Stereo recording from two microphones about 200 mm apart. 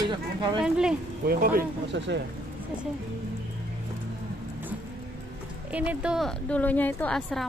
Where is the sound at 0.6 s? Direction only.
5° right (ahead or behind).